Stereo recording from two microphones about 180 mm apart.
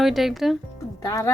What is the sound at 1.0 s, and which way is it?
Speech, 15° left (ahead or behind).